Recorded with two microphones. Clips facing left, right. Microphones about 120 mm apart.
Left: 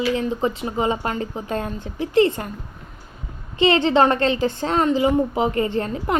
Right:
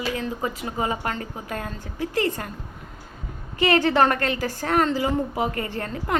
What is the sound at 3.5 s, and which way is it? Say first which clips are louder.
A woman's voice: left 3 dB; 20° left (ahead or behind).